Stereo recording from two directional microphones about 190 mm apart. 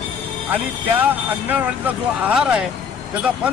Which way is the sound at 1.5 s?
10° right (ahead or behind).